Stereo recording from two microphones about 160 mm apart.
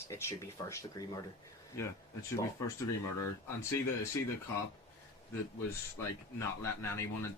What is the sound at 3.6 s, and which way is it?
Speech, 15° left (ahead or behind).